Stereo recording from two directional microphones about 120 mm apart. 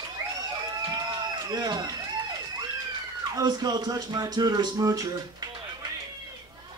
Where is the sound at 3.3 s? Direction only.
35° right (ahead or behind).